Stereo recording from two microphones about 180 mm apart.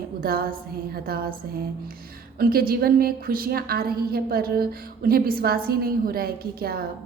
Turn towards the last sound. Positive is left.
turn(degrees=-60)  # may be behind; listen again after turning